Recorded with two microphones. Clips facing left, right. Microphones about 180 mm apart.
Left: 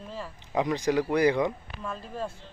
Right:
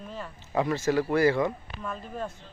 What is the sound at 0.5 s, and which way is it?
Speech, 15° left (ahead or behind).